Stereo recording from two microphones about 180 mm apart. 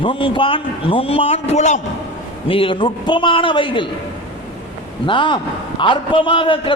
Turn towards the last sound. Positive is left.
turn(degrees=30)  # may be behind; listen again after turning